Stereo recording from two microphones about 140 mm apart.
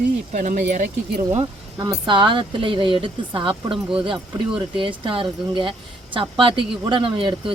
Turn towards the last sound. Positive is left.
turn(degrees=-35)  # may be behind; listen again after turning